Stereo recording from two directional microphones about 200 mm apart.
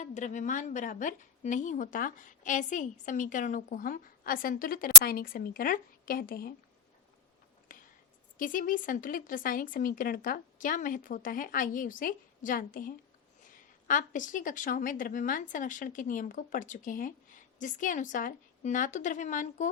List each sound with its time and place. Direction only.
0.0 s a woman's voice: 40° left (ahead or behind)
7.7 s whispering: 40° left (ahead or behind)
8.4 s a woman's voice: 40° left (ahead or behind)